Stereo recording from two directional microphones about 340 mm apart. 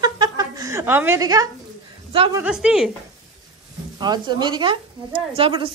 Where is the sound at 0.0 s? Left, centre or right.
Centre.